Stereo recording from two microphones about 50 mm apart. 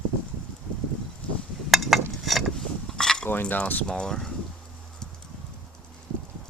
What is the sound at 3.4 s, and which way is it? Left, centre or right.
Speech, left.